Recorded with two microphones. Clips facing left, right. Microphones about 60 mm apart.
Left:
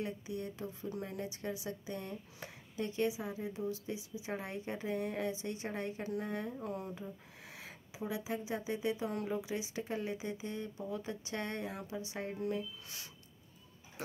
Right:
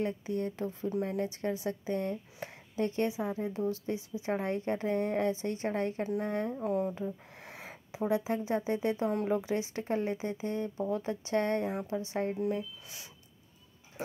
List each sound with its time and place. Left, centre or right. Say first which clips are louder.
0.0 s speech: right 7 dB; right
6.6 s a woman's voice: right 10 dB; right
7.6 s a woman's voice: right 8 dB; right
12.8 s speech: right 1 dB; centre